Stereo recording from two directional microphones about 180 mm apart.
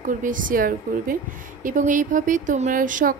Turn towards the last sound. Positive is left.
turn(degrees=-45)  # may be behind; listen again after turning